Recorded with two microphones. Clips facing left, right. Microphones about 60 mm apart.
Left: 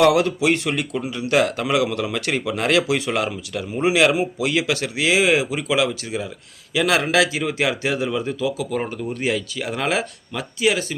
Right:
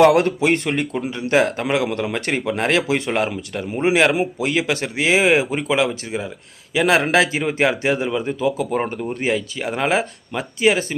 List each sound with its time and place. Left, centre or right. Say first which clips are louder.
0.0 s speech: right 2 dB; right